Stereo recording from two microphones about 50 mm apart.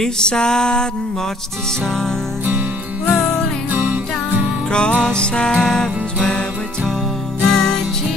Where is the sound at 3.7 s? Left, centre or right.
Right.